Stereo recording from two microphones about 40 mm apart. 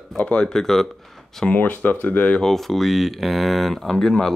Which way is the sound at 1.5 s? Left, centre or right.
Left.